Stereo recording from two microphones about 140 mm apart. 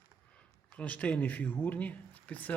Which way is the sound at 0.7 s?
10° left (ahead or behind).